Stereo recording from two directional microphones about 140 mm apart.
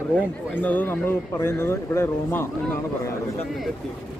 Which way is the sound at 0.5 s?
10° left (ahead or behind).